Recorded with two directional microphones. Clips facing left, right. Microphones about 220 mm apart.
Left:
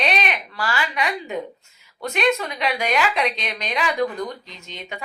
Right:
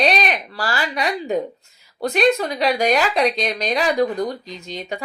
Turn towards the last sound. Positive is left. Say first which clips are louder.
# right 7 dB
turn(degrees=-35)  # may be behind; listen again after turning